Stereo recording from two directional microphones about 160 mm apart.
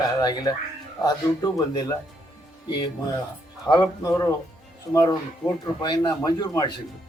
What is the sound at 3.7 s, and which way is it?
A man's voice, 25° left (ahead or behind).